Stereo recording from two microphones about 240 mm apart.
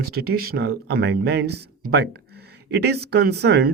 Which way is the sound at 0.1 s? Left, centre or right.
Right.